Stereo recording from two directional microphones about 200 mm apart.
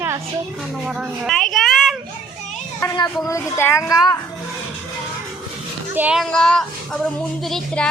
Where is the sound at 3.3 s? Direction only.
15° left (ahead or behind).